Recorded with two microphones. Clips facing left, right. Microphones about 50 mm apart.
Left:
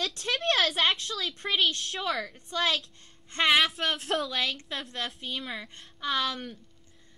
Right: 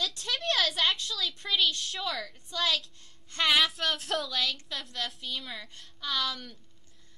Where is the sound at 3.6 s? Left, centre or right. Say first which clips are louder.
Left 2 dB; centre.